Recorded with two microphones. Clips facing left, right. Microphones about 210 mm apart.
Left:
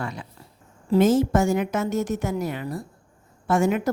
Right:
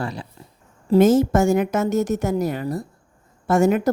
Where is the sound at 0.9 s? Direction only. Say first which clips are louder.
Right 3 dB; 45° right (ahead or behind).